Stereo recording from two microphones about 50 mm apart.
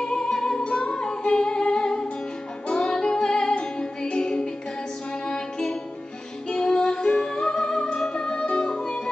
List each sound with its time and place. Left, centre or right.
0.0 s music: centre